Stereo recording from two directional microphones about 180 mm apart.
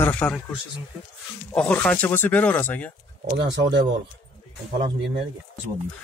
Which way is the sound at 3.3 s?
70° right (ahead or behind).